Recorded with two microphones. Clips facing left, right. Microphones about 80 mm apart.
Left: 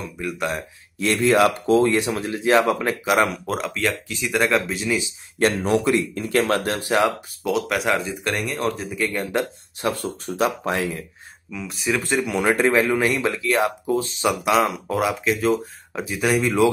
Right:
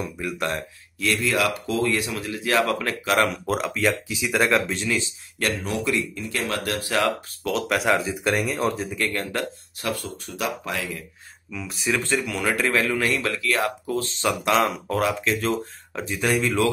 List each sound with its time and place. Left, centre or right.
0.0 s speech: centre
0.9 s speech: left
3.3 s speech: centre
5.4 s speech: left
7.4 s speech: centre
9.2 s speech: left
9.9 s speech: left
11.5 s speech: centre
12.1 s speech: centre